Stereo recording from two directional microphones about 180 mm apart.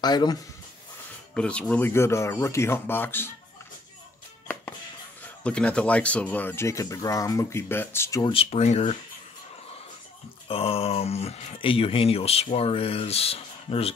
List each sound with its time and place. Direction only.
0.0 s speech: 20° left (ahead or behind)
1.3 s speech: 5° left (ahead or behind)
5.4 s speech: 5° left (ahead or behind)
8.3 s speech: 35° left (ahead or behind)
10.5 s speech: 35° left (ahead or behind)